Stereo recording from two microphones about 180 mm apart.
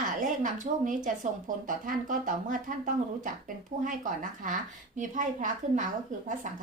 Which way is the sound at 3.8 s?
45° right (ahead or behind).